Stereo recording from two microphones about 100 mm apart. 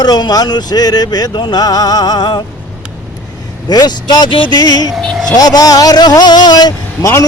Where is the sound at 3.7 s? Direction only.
45° left (ahead or behind).